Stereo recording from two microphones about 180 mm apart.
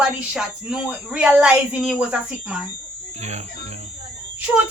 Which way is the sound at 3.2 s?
40° right (ahead or behind).